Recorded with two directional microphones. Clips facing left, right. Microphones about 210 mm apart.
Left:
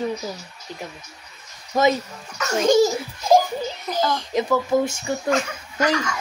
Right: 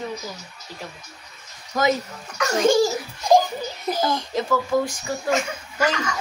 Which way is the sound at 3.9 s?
10° right (ahead or behind).